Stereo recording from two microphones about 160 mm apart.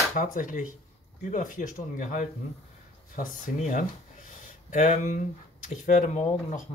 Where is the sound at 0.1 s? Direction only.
60° left (ahead or behind).